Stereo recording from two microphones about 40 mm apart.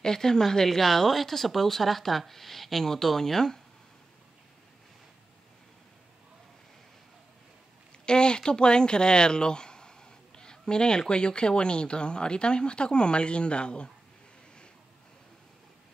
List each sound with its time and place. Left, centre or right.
0.0 s speech: centre
8.0 s a sound: left
10.7 s speech: centre